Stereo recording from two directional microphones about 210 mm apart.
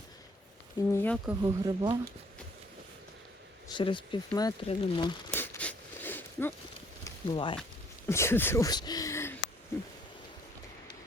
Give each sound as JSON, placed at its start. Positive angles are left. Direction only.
{"t": 0.9, "sound": "speech", "side_deg": 10}
{"t": 1.3, "sound": "speech", "side_deg": -15}
{"t": 3.7, "sound": "speech", "side_deg": 25}
{"t": 5.3, "sound": "a sound", "side_deg": 10}
{"t": 7.0, "sound": "a sound", "side_deg": 25}
{"t": 8.0, "sound": "speech", "side_deg": 10}